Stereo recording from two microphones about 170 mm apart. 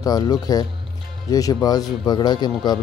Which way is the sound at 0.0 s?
20° left (ahead or behind).